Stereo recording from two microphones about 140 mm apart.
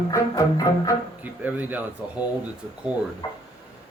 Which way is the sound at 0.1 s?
25° left (ahead or behind).